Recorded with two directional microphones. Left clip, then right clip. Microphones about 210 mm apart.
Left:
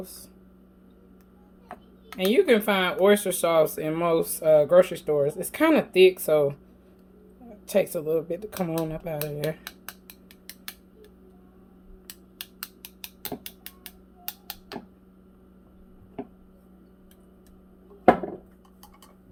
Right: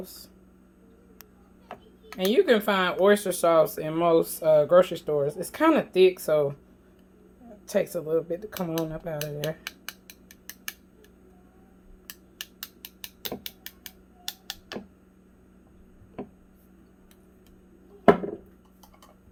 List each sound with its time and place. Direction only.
2.1 s speech: 5° right (ahead or behind)
7.7 s speech: 5° left (ahead or behind)
12.8 s a sound: 15° right (ahead or behind)